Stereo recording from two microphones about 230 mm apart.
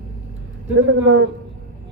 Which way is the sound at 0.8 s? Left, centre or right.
Right.